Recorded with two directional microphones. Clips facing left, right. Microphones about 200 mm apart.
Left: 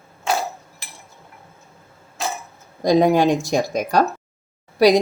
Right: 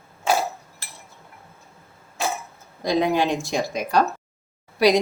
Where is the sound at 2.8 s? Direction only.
45° left (ahead or behind).